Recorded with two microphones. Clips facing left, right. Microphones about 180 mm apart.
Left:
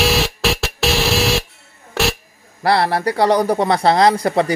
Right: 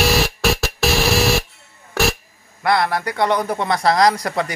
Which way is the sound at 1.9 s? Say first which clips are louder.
Even; centre (ahead or behind).